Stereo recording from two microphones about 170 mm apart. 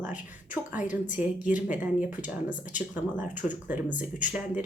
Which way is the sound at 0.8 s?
50° left (ahead or behind).